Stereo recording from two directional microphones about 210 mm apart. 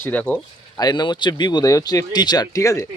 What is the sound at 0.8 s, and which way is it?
Speech, 20° left (ahead or behind).